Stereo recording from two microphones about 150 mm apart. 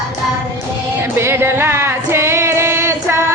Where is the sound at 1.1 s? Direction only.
15° right (ahead or behind).